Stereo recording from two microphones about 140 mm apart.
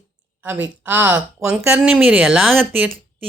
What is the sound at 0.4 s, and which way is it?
Speech, 10° right (ahead or behind).